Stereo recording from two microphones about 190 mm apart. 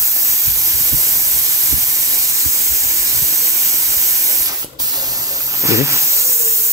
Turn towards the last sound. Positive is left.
turn(degrees=-15)  # may be behind; listen again after turning